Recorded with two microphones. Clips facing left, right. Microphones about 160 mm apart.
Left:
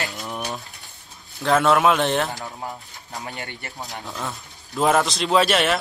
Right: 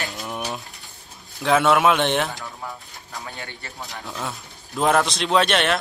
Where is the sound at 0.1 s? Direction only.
Centre (ahead or behind).